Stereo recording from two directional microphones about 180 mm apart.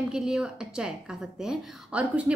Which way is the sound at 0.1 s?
5° right (ahead or behind).